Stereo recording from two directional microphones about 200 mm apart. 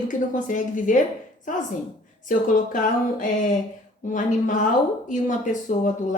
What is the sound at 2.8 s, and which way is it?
A woman's voice, 40° left (ahead or behind).